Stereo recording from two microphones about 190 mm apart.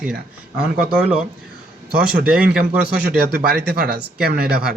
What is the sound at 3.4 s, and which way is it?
Speech, 55° right (ahead or behind).